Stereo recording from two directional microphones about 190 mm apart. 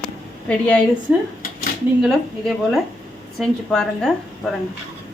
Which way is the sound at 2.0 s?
Centre (ahead or behind).